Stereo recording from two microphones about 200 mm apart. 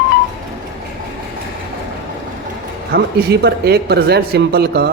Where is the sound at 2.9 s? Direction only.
50° right (ahead or behind).